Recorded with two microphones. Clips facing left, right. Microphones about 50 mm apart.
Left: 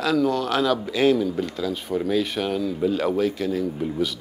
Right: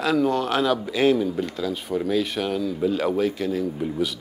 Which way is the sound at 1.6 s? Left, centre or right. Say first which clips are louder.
Even; centre.